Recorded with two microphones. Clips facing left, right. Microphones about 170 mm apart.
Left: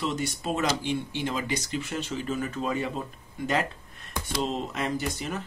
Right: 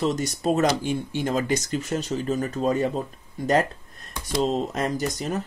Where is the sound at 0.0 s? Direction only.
40° right (ahead or behind).